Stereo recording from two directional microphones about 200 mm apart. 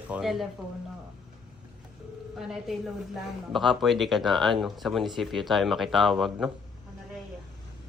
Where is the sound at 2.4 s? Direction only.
Centre (ahead or behind).